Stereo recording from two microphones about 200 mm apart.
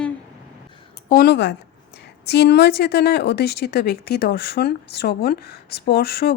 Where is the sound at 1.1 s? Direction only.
50° left (ahead or behind).